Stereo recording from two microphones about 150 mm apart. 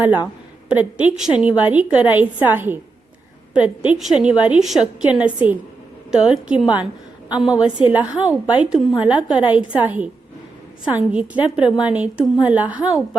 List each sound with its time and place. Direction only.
0.7 s a woman's voice: 10° right (ahead or behind)
9.1 s a woman's voice: 35° left (ahead or behind)
9.6 s a woman's voice: 10° right (ahead or behind)